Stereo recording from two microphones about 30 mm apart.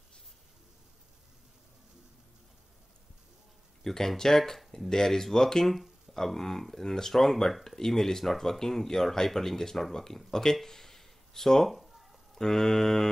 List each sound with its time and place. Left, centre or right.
3.8 s speech: centre
11.7 s a sound: centre
12.4 s speech: centre